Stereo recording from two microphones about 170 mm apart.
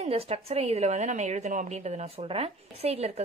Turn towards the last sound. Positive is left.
turn(degrees=-35)  # may be behind; listen again after turning